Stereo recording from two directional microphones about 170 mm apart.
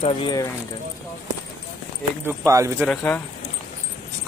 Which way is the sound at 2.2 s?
15° right (ahead or behind).